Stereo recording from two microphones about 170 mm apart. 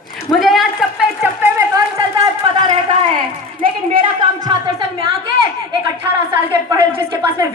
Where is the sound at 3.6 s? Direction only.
30° right (ahead or behind).